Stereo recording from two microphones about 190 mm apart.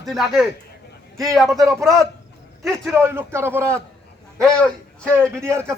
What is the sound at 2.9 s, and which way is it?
Speech, 10° right (ahead or behind).